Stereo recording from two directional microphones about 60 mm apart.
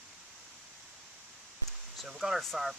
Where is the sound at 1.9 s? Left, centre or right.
Centre.